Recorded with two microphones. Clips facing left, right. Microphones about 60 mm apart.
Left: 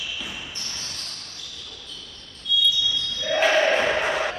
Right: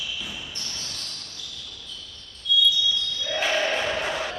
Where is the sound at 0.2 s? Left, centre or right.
Left.